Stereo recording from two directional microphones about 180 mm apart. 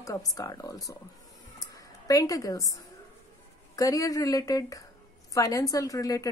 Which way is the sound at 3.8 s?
20° left (ahead or behind).